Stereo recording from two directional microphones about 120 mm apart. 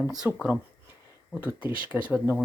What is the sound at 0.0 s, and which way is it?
Speech, 5° right (ahead or behind).